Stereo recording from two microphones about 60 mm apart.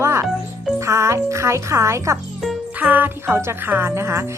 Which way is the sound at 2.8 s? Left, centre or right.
Right.